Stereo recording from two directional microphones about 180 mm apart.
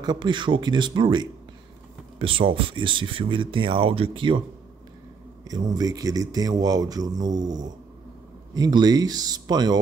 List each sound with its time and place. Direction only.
0.0 s speech: 25° right (ahead or behind)
5.4 s speech: 20° right (ahead or behind)